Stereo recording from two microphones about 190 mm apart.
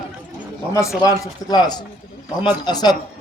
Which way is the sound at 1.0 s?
20° left (ahead or behind).